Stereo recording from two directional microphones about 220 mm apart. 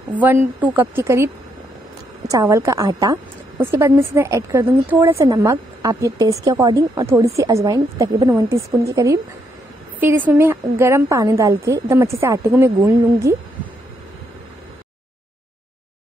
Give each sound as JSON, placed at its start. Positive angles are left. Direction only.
{"t": 0.1, "sound": "a woman's voice", "side_deg": -5}